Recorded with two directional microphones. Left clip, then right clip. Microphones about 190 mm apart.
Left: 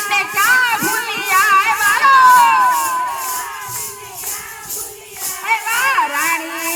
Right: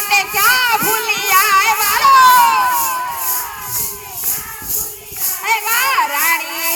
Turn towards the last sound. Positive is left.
turn(degrees=-50)  # may be behind; listen again after turning